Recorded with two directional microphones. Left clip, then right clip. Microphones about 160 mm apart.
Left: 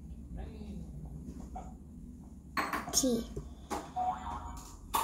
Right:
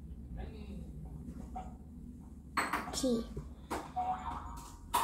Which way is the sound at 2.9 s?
65° left (ahead or behind).